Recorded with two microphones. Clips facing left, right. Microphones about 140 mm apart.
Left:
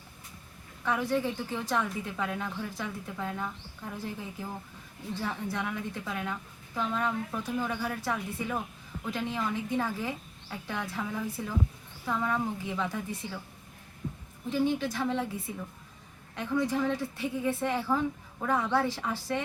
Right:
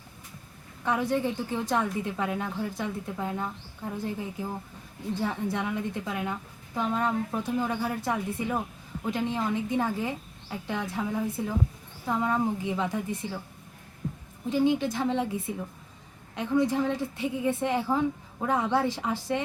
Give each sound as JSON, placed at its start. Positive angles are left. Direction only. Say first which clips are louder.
{"t": 0.9, "sound": "a woman's voice", "louder": "right 2 dB", "side_deg": -20}
{"t": 5.2, "sound": "a woman's voice", "louder": "right 4 dB", "side_deg": -20}
{"t": 7.0, "sound": "a woman's voice", "louder": "right 4 dB", "side_deg": -35}
{"t": 14.5, "sound": "a woman's voice", "louder": "right 4 dB", "side_deg": -20}